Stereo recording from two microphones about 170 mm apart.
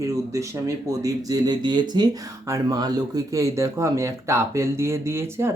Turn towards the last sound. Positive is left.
turn(degrees=-15)  # may be behind; listen again after turning